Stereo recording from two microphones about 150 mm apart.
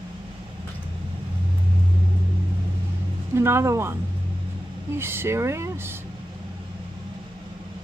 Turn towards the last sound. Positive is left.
turn(degrees=-20)  # may be behind; listen again after turning